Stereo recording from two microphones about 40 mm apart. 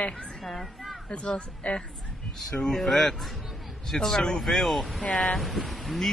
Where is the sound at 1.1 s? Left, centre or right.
Left.